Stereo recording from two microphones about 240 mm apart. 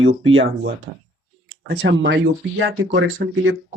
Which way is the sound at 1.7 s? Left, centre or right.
Right.